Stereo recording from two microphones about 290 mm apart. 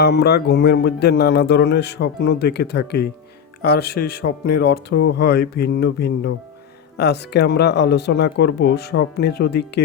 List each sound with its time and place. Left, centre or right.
0.0 s speech: left